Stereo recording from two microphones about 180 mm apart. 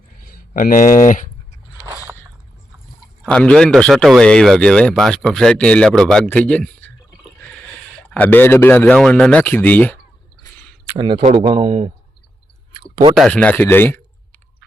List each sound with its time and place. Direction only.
0.2 s speech: 55° left (ahead or behind)
1.8 s biting: 15° right (ahead or behind)
3.2 s a man's voice: 5° left (ahead or behind)
10.9 s speech: 25° right (ahead or behind)
13.1 s speech: 5° left (ahead or behind)